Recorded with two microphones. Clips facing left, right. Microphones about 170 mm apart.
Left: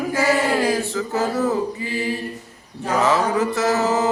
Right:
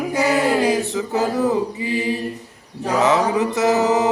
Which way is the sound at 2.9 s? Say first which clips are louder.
Right 2 dB; 20° right (ahead or behind).